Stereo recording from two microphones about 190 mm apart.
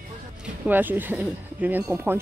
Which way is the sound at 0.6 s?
10° right (ahead or behind).